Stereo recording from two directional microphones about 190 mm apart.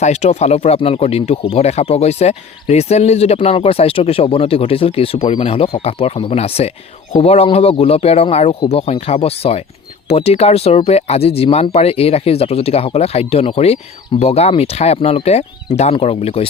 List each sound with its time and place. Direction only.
0.0 s speech: 35° left (ahead or behind)